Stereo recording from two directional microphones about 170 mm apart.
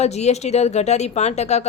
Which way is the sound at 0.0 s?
40° left (ahead or behind).